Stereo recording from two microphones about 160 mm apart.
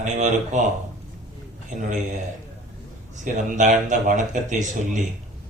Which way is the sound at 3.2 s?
50° right (ahead or behind).